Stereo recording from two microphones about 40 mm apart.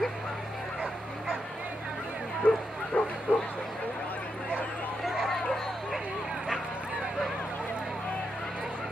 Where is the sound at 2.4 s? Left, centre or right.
Left.